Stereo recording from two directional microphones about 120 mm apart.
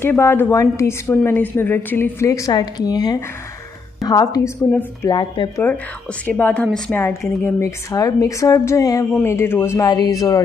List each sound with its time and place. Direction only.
0.0 s a woman's voice: 20° left (ahead or behind); by 5.5 s 40° left (ahead or behind)
6.2 s a woman's voice: 15° left (ahead or behind)
9.8 s speech: 35° left (ahead or behind)